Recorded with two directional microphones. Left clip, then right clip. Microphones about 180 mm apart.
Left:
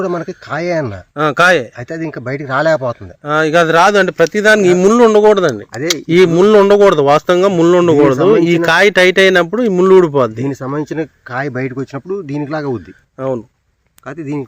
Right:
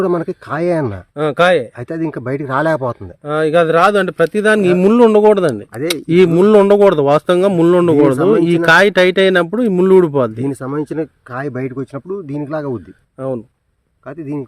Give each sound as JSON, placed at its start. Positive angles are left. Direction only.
{"t": 0.0, "sound": "speech", "side_deg": -50}
{"t": 1.1, "sound": "speech", "side_deg": -10}
{"t": 1.8, "sound": "speech", "side_deg": -45}
{"t": 3.2, "sound": "speech", "side_deg": -10}